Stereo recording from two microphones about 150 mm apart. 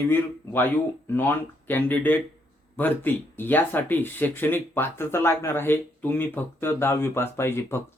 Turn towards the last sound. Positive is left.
turn(degrees=15)  # may be behind; listen again after turning